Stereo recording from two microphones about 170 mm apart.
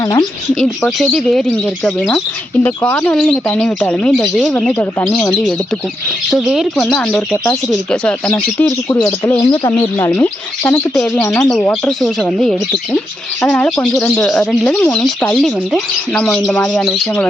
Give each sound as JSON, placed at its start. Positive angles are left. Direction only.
{"t": 0.0, "sound": "speech", "side_deg": 20}
{"t": 0.6, "sound": "speech", "side_deg": 0}
{"t": 9.2, "sound": "speech", "side_deg": 25}
{"t": 10.1, "sound": "speech", "side_deg": 10}